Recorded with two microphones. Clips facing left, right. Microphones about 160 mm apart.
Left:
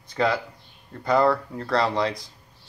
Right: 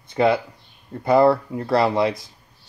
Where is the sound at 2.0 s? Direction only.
5° right (ahead or behind).